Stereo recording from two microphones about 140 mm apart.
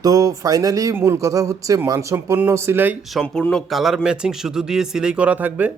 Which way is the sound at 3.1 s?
5° left (ahead or behind).